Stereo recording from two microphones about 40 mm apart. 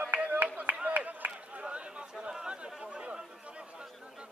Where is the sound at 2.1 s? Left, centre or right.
Centre.